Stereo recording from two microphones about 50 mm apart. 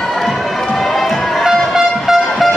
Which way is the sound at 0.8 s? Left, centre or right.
Centre.